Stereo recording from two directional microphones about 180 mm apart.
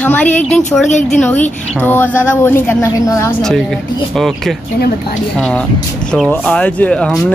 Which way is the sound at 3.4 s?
Centre (ahead or behind).